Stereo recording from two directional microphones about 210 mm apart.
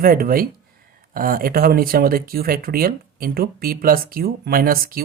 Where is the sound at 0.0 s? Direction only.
45° right (ahead or behind).